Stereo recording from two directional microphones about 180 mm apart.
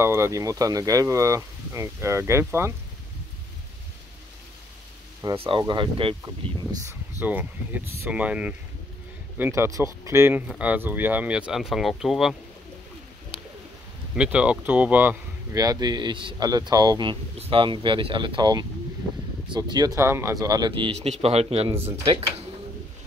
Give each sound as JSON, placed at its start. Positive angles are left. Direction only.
{"t": 0.0, "sound": "speech", "side_deg": -15}
{"t": 5.2, "sound": "speech", "side_deg": -30}
{"t": 7.2, "sound": "speech", "side_deg": -10}
{"t": 14.1, "sound": "speech", "side_deg": -5}
{"t": 21.7, "sound": "speech", "side_deg": -10}
{"t": 22.0, "sound": "speech", "side_deg": -30}